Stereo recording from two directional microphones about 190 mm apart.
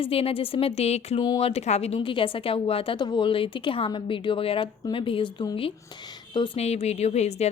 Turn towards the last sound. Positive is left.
turn(degrees=35)  # may be behind; listen again after turning